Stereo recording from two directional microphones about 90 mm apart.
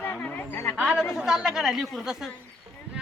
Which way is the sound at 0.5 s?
25° left (ahead or behind).